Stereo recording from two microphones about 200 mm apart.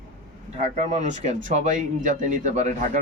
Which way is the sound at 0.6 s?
35° right (ahead or behind).